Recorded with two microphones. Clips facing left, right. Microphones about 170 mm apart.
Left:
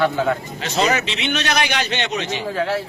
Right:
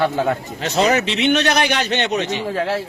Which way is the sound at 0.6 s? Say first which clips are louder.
Right 3 dB; 60° right (ahead or behind).